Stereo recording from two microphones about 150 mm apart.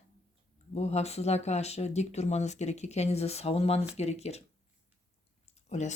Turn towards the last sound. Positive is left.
turn(degrees=50)  # may be behind; listen again after turning